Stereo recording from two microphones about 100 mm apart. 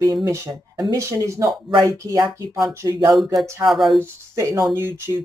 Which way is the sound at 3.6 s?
Centre (ahead or behind).